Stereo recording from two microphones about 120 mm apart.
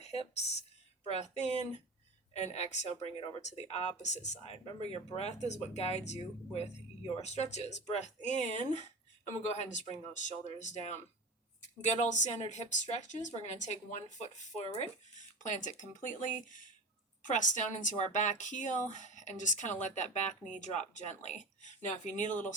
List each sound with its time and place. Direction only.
0.0 s speech: 60° left (ahead or behind)
3.2 s speech: 50° left (ahead or behind)
3.4 s speech: 65° left (ahead or behind)
4.6 s speech: 60° left (ahead or behind); by 22.4 s 90° left